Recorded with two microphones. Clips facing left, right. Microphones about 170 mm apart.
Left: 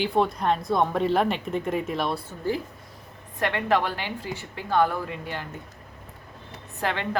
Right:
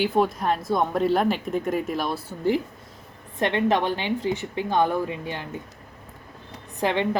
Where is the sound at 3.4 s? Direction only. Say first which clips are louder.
Right 2 dB; 20° right (ahead or behind).